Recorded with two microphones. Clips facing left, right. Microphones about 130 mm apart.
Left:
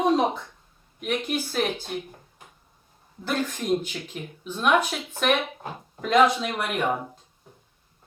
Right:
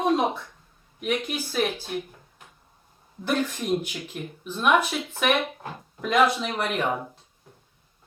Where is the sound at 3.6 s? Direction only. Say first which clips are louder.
Left 1 dB; 5° right (ahead or behind).